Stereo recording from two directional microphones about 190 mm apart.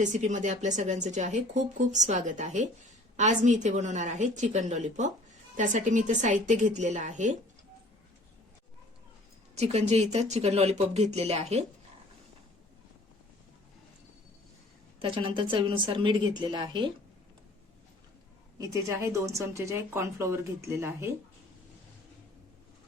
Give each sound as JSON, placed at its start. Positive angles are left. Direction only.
{"t": 0.0, "sound": "a woman's voice", "side_deg": -40}
{"t": 9.6, "sound": "a woman's voice", "side_deg": -35}
{"t": 14.9, "sound": "a woman's voice", "side_deg": -30}
{"t": 18.6, "sound": "speech", "side_deg": -15}